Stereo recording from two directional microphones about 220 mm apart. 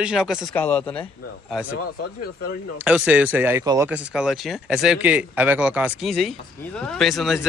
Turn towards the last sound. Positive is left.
turn(degrees=0)  # may be behind; listen again after turning